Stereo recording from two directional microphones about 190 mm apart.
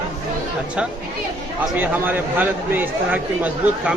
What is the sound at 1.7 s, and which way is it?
Speech, 10° right (ahead or behind).